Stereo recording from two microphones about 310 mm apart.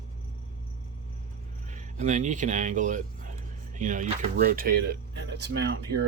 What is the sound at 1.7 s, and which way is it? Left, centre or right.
Speech, right.